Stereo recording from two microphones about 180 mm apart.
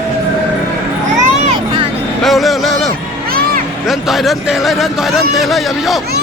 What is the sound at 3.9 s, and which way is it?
Speech, centre (ahead or behind).